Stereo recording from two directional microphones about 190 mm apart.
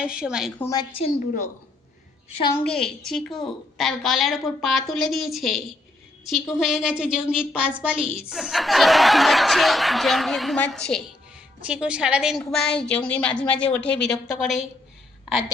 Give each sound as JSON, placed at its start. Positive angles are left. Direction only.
{"t": 0.0, "sound": "a woman's voice", "side_deg": -5}
{"t": 0.6, "sound": "a woman's voice", "side_deg": 20}
{"t": 2.6, "sound": "a woman's voice", "side_deg": 5}